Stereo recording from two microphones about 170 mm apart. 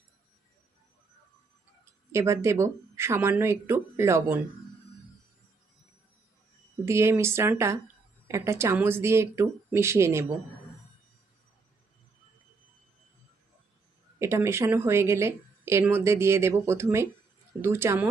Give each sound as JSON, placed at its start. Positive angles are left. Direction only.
{"t": 2.1, "sound": "speech", "side_deg": -15}
{"t": 6.8, "sound": "speech", "side_deg": -15}
{"t": 14.2, "sound": "speech", "side_deg": -15}